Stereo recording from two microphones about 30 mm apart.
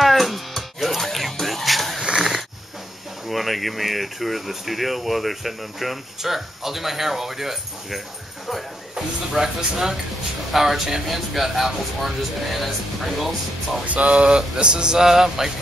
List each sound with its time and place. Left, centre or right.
0.0 s music: centre
2.1 s a sound: centre
3.3 s speech: centre
13.8 s speech: right
14.3 s a sound: right
15.0 s speech: centre